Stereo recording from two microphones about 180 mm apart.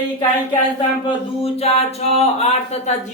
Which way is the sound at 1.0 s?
35° left (ahead or behind).